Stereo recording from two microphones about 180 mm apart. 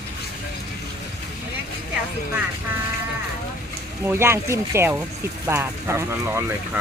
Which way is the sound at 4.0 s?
15° right (ahead or behind).